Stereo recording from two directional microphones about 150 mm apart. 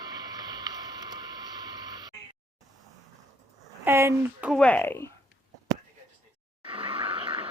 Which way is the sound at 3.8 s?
15° right (ahead or behind).